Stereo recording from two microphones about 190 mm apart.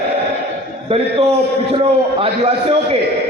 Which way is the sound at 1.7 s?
30° right (ahead or behind).